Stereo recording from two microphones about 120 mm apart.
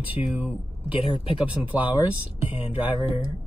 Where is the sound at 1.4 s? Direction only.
10° right (ahead or behind).